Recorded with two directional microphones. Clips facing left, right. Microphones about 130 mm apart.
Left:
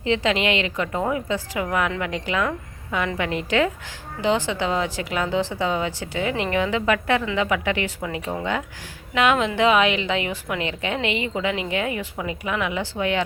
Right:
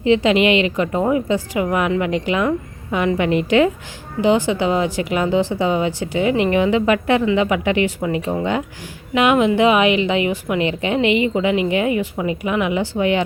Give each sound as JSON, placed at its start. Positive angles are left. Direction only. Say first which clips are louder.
{"t": 0.0, "sound": "a woman's voice", "louder": "right 7 dB", "side_deg": -15}